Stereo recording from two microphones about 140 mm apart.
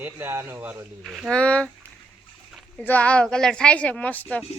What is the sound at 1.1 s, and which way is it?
Speech, 5° right (ahead or behind).